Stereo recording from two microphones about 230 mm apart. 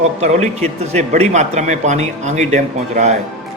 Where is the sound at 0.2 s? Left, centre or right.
Right.